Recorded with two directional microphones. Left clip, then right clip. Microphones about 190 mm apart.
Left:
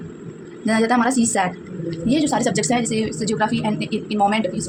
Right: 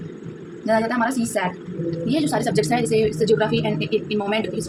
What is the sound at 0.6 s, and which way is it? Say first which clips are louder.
Speech: left 2 dB; 50° left (ahead or behind).